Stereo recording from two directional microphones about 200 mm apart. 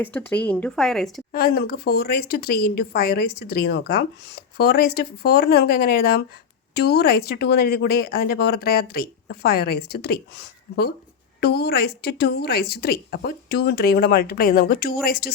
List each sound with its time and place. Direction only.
0.0 s speech: 10° left (ahead or behind)
1.3 s speech: 45° left (ahead or behind)